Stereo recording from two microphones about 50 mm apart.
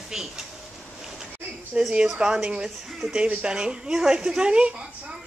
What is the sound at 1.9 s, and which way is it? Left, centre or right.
A woman's voice, centre.